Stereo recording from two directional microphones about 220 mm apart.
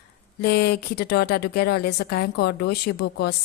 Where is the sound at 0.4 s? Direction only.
45° left (ahead or behind).